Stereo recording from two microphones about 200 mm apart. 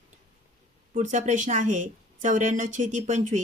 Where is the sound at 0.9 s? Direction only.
35° right (ahead or behind).